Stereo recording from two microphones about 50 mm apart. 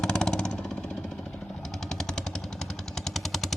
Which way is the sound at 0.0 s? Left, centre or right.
Centre.